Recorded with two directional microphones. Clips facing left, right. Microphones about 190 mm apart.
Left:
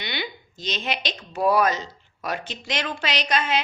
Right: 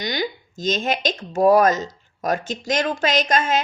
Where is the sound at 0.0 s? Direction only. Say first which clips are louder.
Right 7 dB; 40° right (ahead or behind).